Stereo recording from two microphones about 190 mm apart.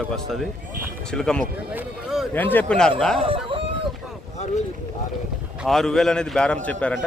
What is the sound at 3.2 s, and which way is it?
Speech, 30° right (ahead or behind).